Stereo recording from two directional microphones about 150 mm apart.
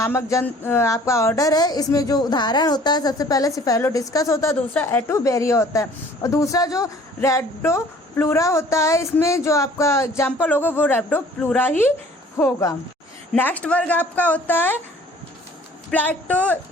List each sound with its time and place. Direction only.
0.0 s a woman's voice: 20° left (ahead or behind)
16.3 s a woman's voice: 10° left (ahead or behind)